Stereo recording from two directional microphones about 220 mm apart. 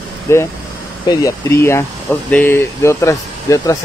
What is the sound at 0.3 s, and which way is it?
Speech, 10° left (ahead or behind).